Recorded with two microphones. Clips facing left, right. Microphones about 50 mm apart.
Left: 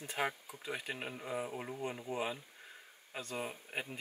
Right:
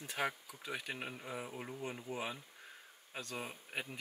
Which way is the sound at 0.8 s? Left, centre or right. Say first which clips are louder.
Left 2 dB; centre.